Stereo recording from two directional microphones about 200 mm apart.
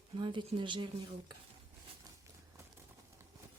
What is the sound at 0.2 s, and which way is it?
Speech, 25° right (ahead or behind).